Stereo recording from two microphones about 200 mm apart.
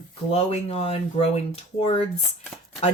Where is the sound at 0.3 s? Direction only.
30° left (ahead or behind).